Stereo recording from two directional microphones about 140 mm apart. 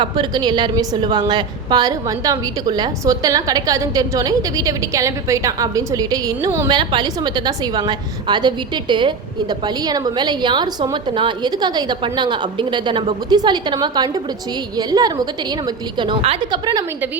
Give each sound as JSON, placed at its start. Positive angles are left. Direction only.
{"t": 0.0, "sound": "a woman's voice", "side_deg": -30}